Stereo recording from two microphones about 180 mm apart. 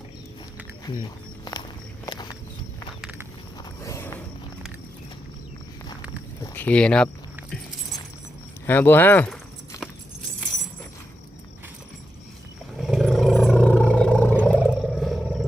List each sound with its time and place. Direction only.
2.0 s walk: 25° left (ahead or behind)
3.0 s a sound: 5° right (ahead or behind)
3.8 s walk: 15° left (ahead or behind)
6.4 s speech: 10° left (ahead or behind)
8.6 s speech: 10° left (ahead or behind)
12.8 s roar: 5° right (ahead or behind)
14.6 s wild animals: 5° right (ahead or behind)